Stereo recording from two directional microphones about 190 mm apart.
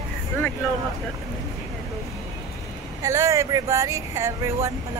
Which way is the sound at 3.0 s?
15° right (ahead or behind).